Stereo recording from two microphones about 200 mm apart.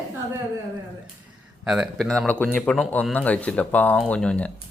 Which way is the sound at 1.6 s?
5° right (ahead or behind).